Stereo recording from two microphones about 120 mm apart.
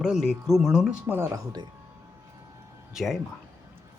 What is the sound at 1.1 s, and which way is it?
Speech, 20° right (ahead or behind).